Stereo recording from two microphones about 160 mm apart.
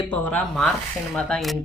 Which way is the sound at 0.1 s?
10° left (ahead or behind).